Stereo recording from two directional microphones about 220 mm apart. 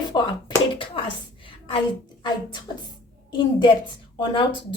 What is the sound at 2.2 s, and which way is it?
Speech, 20° left (ahead or behind).